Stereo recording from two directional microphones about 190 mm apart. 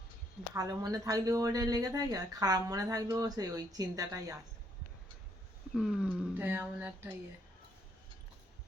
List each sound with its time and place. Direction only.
0.5 s speech: 20° right (ahead or behind)
5.7 s speech: centre (ahead or behind)